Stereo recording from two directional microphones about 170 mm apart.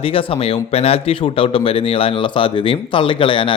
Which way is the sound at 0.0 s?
35° left (ahead or behind).